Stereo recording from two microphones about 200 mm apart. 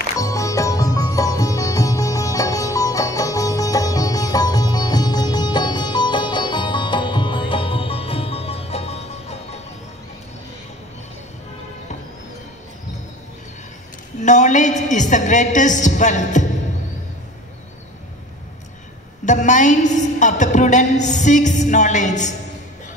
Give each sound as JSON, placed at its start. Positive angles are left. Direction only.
{"t": 0.2, "sound": "music", "side_deg": 15}
{"t": 14.2, "sound": "a sound", "side_deg": 35}
{"t": 19.2, "sound": "a woman's voice", "side_deg": 35}